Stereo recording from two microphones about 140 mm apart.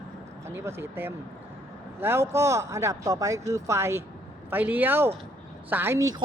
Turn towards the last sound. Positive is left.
turn(degrees=-20)  # may be behind; listen again after turning